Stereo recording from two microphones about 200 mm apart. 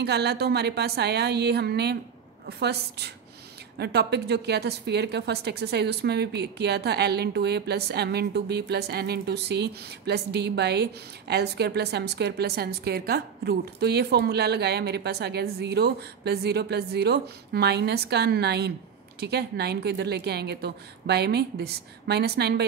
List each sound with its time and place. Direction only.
0.0 s a woman's voice: 55° right (ahead or behind)